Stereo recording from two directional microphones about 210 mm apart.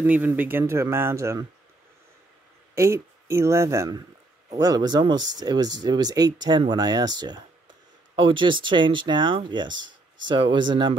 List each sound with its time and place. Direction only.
0.0 s speech: 10° right (ahead or behind)
2.7 s speech: 15° right (ahead or behind)